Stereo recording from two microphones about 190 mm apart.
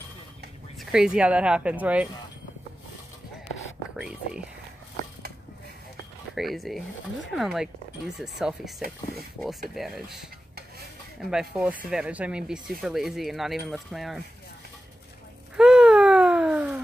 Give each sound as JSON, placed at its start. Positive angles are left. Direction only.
{"t": 0.7, "sound": "speech", "side_deg": -5}
{"t": 3.9, "sound": "whispering", "side_deg": -5}
{"t": 6.3, "sound": "speech", "side_deg": 0}
{"t": 8.8, "sound": "speech", "side_deg": -50}
{"t": 9.4, "sound": "speech", "side_deg": 0}
{"t": 15.5, "sound": "a sound", "side_deg": -5}